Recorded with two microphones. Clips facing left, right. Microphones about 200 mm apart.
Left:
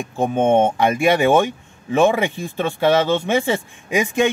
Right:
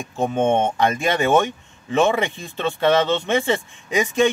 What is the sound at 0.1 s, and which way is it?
Speech, 15° left (ahead or behind).